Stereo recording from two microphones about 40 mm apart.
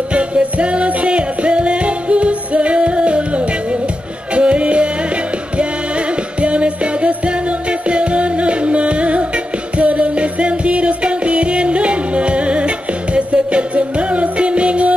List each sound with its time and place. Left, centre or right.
0.1 s music: right